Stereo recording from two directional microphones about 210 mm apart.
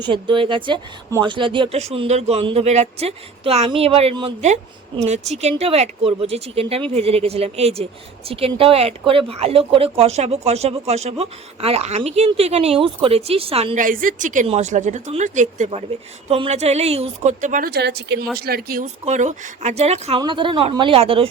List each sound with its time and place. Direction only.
0.0 s speech: 20° right (ahead or behind)